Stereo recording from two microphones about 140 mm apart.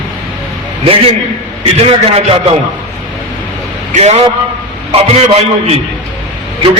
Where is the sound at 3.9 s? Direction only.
50° right (ahead or behind).